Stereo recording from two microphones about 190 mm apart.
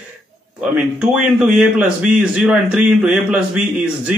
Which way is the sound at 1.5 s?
5° right (ahead or behind).